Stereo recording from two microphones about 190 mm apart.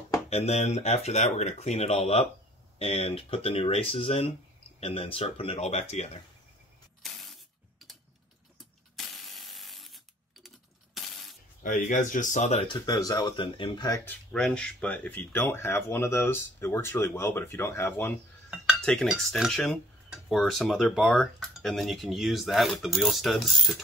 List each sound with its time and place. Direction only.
0.3 s speech: 35° left (ahead or behind)
7.0 s spray: centre (ahead or behind)
8.9 s ratchet: centre (ahead or behind)
11.0 s coin: centre (ahead or behind)
11.6 s speech: 45° left (ahead or behind)
12.7 s speech: 20° left (ahead or behind)
14.3 s speech: 5° left (ahead or behind)
18.5 s cutlery: centre (ahead or behind)